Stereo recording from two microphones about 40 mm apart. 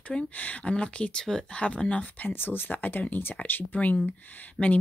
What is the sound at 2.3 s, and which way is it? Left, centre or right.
Speech, left.